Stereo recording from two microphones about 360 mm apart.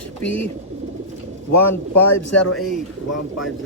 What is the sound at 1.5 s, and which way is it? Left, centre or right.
A man's voice, left.